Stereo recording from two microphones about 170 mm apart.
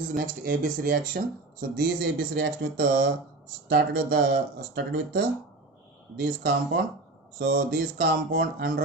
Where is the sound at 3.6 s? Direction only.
70° right (ahead or behind).